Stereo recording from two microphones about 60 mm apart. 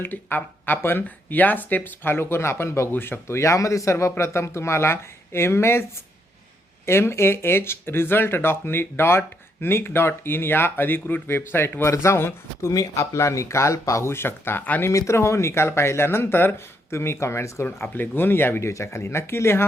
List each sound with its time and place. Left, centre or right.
0.0 s speech: left
2.9 s speech: left
6.8 s speech: left
12.7 s speech: left
14.1 s speech: left
14.6 s speech: left
14.8 s speech: left
17.7 s speech: left
18.7 s speech: left